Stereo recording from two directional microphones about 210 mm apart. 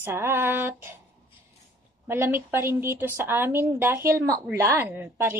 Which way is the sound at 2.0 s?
10° right (ahead or behind).